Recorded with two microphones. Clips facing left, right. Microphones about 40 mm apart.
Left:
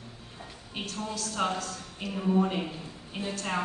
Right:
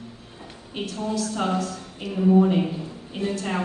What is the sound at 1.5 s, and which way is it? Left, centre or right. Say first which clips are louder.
Speech: right 8 dB; centre.